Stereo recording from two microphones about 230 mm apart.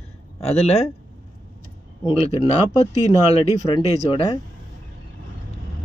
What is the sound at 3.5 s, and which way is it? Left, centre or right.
Speech, left.